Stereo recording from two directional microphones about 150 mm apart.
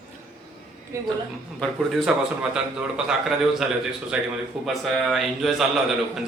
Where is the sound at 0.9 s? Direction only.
20° right (ahead or behind).